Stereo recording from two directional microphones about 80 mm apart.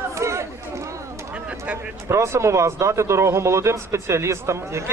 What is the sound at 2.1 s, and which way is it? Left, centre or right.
Speech, right.